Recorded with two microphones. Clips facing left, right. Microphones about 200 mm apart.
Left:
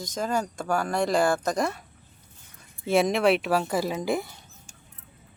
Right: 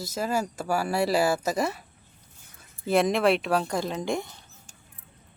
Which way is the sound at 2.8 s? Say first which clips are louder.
Even; centre (ahead or behind).